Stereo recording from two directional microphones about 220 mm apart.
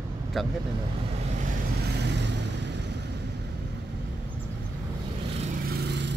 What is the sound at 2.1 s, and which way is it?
Vehicle, 50° right (ahead or behind).